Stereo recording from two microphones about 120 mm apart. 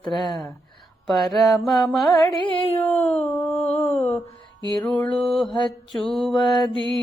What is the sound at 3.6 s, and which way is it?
Mantra, 60° left (ahead or behind).